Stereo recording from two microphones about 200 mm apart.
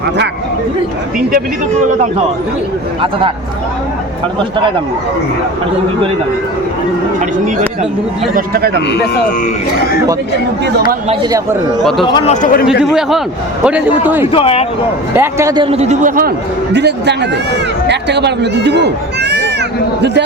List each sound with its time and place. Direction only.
8.4 s a man's voice: 50° right (ahead or behind)
11.1 s a man's voice: 20° right (ahead or behind)
12.0 s speech: 25° left (ahead or behind)
12.3 s a man's voice: 40° left (ahead or behind)
12.8 s a man's voice: 5° right (ahead or behind)
14.3 s speech: 30° left (ahead or behind)
15.1 s a man's voice: 15° right (ahead or behind); by 16.3 s 45° right (ahead or behind)
16.7 s speech: 60° right (ahead or behind)